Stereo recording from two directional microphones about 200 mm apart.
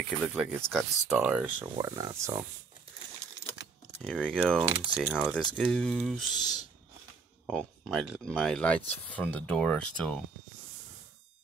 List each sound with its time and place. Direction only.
0.2 s speech: 5° right (ahead or behind)
4.0 s speech: 5° left (ahead or behind)
6.3 s speech: 20° left (ahead or behind)
7.4 s speech: centre (ahead or behind)